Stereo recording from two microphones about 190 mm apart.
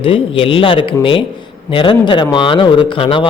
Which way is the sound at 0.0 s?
30° left (ahead or behind).